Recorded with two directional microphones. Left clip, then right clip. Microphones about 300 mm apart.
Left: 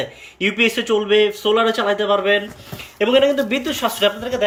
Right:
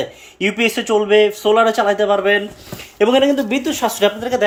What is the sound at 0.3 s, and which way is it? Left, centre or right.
Speech, centre.